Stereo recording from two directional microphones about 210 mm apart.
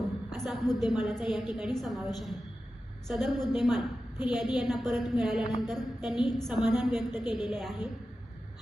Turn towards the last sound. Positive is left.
turn(degrees=0)  # may be behind; listen again after turning